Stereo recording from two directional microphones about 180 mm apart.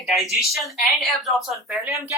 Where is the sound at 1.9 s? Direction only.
15° right (ahead or behind).